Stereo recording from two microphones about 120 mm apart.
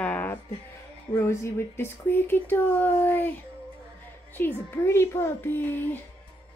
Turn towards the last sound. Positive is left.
turn(degrees=15)  # may be behind; listen again after turning